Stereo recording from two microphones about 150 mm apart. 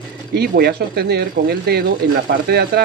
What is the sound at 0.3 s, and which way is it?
Speech, 90° right.